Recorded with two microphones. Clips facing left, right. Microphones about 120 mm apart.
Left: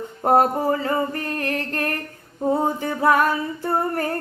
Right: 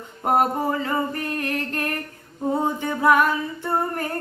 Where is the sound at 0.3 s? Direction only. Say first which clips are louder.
Left 3 dB; 35° left (ahead or behind).